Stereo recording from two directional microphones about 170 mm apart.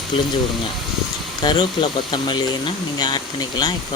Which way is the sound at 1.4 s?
25° left (ahead or behind).